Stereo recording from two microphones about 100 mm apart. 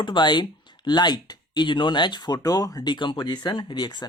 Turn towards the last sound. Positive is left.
turn(degrees=45)  # may be behind; listen again after turning